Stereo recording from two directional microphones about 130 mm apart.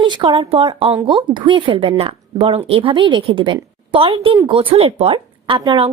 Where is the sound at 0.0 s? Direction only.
40° right (ahead or behind).